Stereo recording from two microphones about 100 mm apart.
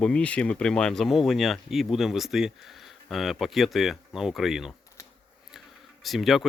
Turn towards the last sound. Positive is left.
turn(degrees=0)  # may be behind; listen again after turning